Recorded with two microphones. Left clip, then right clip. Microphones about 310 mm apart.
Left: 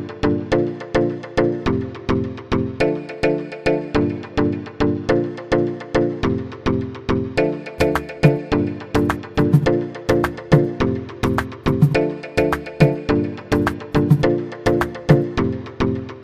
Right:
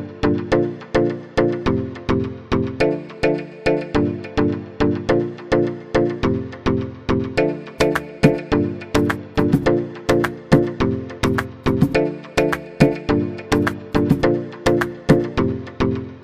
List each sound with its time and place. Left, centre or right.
0.2 s music: centre